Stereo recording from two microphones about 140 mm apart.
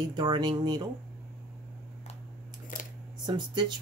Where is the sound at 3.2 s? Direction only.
30° right (ahead or behind).